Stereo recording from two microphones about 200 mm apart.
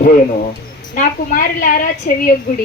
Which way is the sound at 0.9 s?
45° left (ahead or behind).